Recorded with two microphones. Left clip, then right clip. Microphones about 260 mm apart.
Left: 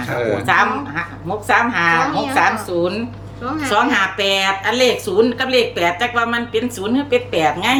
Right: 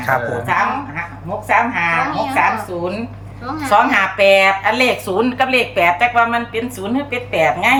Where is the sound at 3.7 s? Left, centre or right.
Centre.